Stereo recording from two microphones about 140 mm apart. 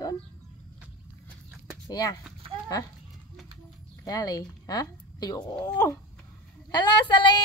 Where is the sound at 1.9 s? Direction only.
25° left (ahead or behind).